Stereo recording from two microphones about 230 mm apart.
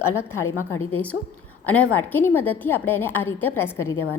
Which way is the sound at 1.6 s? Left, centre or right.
Centre.